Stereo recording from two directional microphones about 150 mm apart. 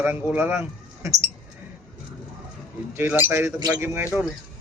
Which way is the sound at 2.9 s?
15° right (ahead or behind).